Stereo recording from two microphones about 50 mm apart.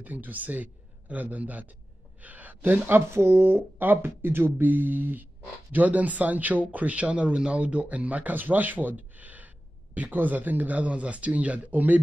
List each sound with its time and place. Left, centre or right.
0.0 s speech: right
3.1 s speech: right